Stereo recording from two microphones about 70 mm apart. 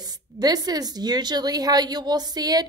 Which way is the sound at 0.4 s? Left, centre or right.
Right.